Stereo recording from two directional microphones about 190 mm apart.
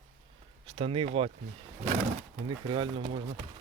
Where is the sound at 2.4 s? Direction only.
25° right (ahead or behind).